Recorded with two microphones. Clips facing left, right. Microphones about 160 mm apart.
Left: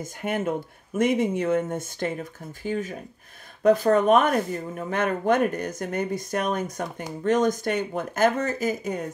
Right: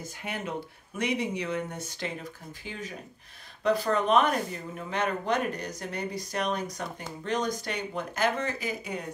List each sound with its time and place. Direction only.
0.0 s speech: 50° left (ahead or behind)